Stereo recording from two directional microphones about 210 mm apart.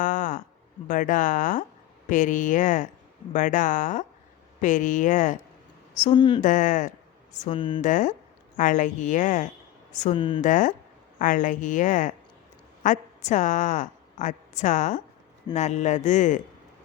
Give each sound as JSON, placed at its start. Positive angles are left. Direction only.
{"t": 0.0, "sound": "a sound", "side_deg": 40}
{"t": 0.9, "sound": "a woman's voice", "side_deg": 40}
{"t": 6.1, "sound": "speech", "side_deg": 20}
{"t": 6.4, "sound": "a woman's voice", "side_deg": 35}
{"t": 7.8, "sound": "a woman's voice", "side_deg": 35}
{"t": 10.4, "sound": "a woman's voice", "side_deg": 35}